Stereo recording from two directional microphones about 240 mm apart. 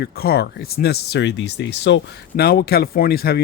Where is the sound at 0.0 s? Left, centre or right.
Left.